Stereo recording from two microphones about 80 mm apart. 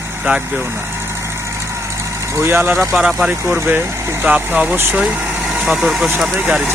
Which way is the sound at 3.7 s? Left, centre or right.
Right.